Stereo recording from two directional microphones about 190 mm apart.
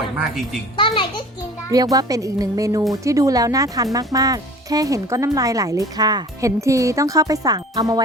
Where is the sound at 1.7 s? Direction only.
20° right (ahead or behind).